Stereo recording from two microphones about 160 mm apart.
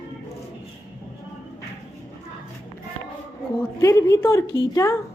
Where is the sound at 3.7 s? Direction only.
20° left (ahead or behind).